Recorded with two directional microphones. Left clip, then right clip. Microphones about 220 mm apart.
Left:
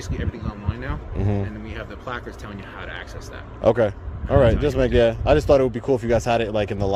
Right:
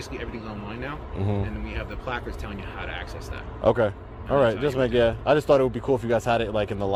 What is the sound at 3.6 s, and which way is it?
Speech, 25° left (ahead or behind).